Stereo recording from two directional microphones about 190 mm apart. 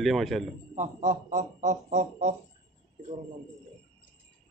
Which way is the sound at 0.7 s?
45° right (ahead or behind).